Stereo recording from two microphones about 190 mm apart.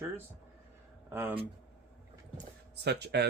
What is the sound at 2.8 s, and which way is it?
Speech, 60° right (ahead or behind).